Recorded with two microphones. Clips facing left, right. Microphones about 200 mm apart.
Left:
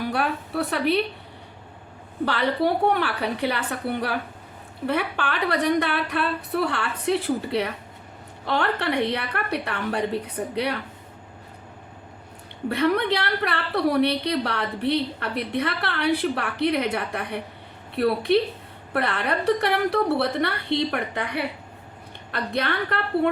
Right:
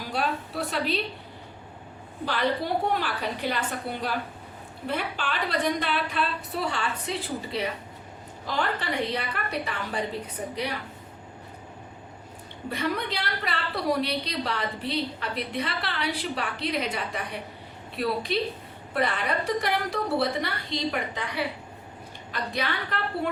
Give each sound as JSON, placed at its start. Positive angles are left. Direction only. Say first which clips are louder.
{"t": 0.0, "sound": "a woman's voice", "louder": "left 4 dB", "side_deg": 60}
{"t": 2.2, "sound": "a woman's voice", "louder": "left 4 dB", "side_deg": 65}
{"t": 12.6, "sound": "a woman's voice", "louder": "left 8 dB", "side_deg": 60}